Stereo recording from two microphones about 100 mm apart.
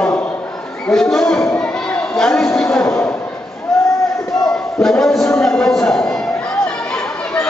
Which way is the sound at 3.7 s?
5° left (ahead or behind).